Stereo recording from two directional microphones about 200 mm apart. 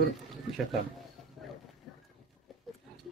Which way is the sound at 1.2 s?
Centre (ahead or behind).